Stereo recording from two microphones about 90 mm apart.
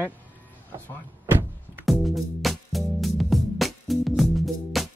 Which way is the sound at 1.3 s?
25° right (ahead or behind).